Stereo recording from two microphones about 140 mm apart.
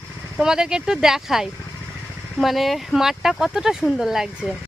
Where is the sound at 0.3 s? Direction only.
5° right (ahead or behind).